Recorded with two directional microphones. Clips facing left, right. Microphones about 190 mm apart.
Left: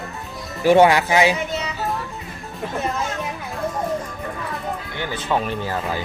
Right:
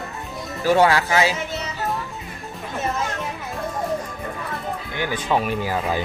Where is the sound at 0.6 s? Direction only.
15° left (ahead or behind).